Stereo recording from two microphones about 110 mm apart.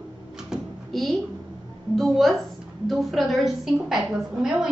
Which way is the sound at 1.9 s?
Centre (ahead or behind).